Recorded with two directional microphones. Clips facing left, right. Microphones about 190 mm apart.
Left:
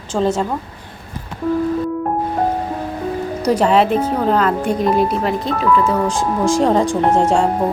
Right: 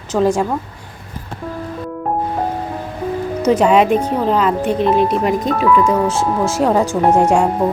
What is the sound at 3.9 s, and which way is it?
Speech, 5° left (ahead or behind).